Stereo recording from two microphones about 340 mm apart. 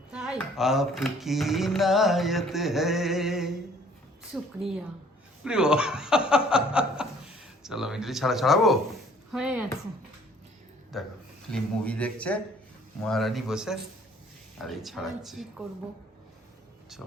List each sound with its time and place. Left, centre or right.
0.1 s speech: centre
10.9 s speech: centre